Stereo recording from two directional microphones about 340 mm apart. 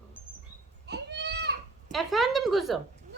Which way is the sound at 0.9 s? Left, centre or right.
Right.